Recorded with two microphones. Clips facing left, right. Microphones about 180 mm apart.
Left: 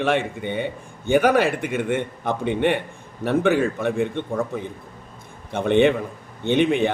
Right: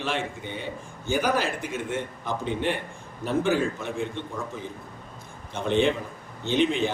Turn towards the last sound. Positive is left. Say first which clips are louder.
# left 5 dB
turn(degrees=60)  # may be behind; listen again after turning